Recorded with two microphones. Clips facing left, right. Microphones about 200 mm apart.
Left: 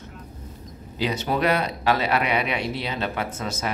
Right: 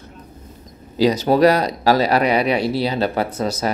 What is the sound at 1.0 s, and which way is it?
Speech, 35° right (ahead or behind).